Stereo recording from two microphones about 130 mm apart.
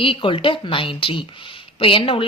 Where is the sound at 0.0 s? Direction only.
40° left (ahead or behind).